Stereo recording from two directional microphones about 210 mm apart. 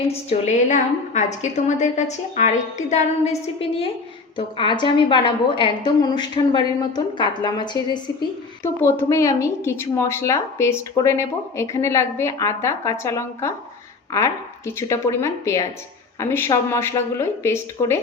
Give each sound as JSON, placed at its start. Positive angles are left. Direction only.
{"t": 0.1, "sound": "a woman's voice", "side_deg": 30}
{"t": 14.8, "sound": "a woman's voice", "side_deg": 15}